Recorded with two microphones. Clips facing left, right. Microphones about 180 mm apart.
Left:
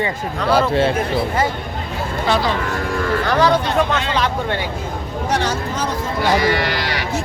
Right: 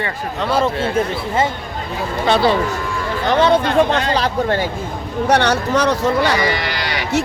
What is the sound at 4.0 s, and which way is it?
Speech, 40° right (ahead or behind).